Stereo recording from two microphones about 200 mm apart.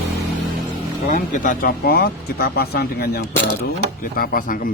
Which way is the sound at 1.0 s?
40° left (ahead or behind).